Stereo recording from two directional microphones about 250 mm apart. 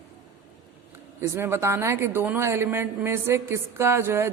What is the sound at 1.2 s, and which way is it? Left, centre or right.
Speech, centre.